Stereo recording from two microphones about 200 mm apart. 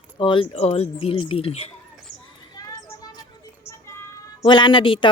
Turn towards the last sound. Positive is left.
turn(degrees=25)  # may be behind; listen again after turning